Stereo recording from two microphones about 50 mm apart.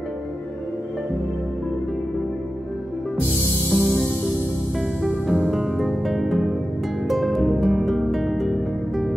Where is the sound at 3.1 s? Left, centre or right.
Right.